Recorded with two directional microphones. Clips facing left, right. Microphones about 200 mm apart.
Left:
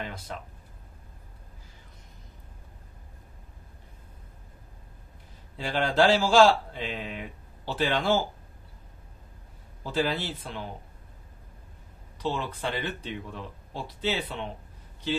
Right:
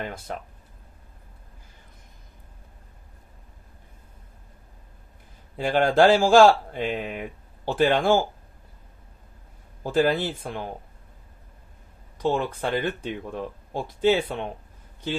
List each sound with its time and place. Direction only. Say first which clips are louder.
0.0 s speech: right 4 dB; 50° right (ahead or behind)
5.6 s speech: right 5 dB; 50° right (ahead or behind)
9.8 s speech: right 6 dB; 50° right (ahead or behind)
12.2 s speech: right 6 dB; 50° right (ahead or behind)